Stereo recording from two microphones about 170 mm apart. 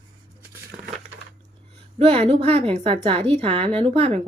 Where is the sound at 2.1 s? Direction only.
35° right (ahead or behind).